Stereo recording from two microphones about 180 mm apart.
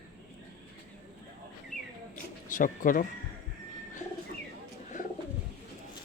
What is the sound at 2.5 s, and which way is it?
Speech, 45° left (ahead or behind).